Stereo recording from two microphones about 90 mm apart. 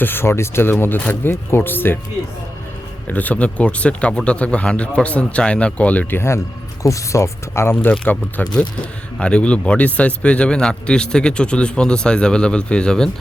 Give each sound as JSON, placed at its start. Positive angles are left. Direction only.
{"t": 0.0, "sound": "speech", "side_deg": 25}
{"t": 3.1, "sound": "speech", "side_deg": 20}